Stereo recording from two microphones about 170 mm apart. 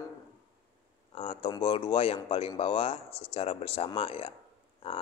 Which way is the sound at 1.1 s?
35° left (ahead or behind).